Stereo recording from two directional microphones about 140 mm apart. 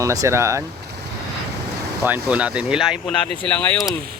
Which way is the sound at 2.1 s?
10° right (ahead or behind).